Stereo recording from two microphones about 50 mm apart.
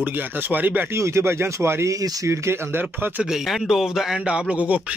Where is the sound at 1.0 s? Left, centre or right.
Right.